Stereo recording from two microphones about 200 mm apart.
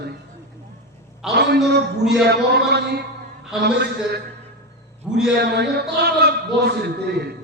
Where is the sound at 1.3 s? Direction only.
55° right (ahead or behind).